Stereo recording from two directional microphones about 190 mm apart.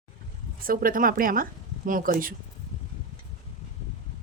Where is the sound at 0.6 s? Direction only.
50° right (ahead or behind).